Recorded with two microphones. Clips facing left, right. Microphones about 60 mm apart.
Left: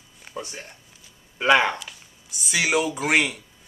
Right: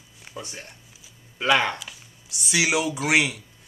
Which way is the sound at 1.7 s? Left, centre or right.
Centre.